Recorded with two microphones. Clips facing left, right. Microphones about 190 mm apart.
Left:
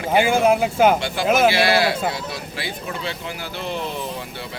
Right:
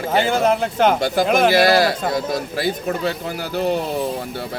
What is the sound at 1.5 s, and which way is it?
Speech, 40° right (ahead or behind).